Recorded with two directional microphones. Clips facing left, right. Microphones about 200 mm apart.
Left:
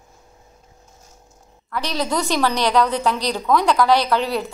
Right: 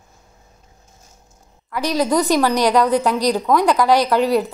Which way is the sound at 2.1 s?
10° right (ahead or behind).